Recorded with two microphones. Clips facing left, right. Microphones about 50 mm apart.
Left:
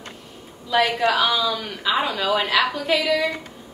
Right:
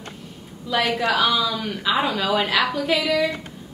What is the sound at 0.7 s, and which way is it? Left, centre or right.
A woman's voice, centre.